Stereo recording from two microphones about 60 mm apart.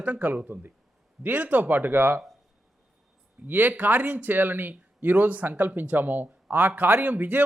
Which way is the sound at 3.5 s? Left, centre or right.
Right.